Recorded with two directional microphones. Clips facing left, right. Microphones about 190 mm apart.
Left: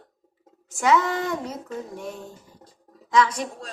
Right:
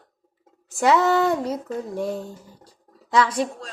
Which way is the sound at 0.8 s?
35° right (ahead or behind).